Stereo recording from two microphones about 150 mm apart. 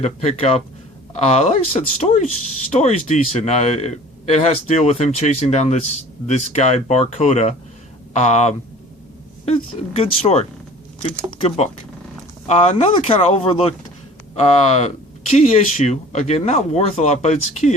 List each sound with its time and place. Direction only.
0.0 s speech: 45° left (ahead or behind)
11.4 s speech: 45° left (ahead or behind)